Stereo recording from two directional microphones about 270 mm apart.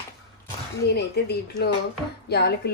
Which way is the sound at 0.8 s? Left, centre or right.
Left.